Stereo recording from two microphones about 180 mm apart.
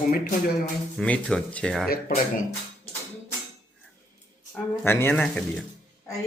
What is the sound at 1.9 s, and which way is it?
Speech, 55° left (ahead or behind).